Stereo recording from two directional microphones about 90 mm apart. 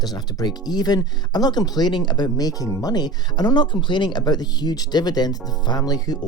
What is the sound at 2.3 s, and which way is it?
Speech, 45° left (ahead or behind).